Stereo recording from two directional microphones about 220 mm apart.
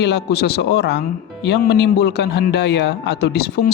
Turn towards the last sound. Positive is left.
turn(degrees=45)  # may be behind; listen again after turning